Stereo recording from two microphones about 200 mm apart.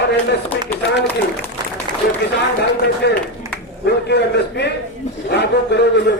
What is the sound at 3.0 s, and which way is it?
A man's voice, 55° left (ahead or behind).